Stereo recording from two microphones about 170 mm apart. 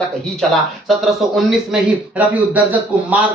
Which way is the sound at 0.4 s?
Centre (ahead or behind).